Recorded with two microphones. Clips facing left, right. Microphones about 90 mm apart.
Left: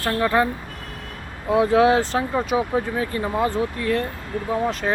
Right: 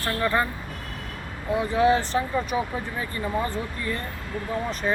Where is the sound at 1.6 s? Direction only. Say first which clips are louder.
Left 5 dB; 90° left.